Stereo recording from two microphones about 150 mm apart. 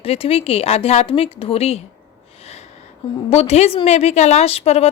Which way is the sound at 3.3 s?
45° left (ahead or behind).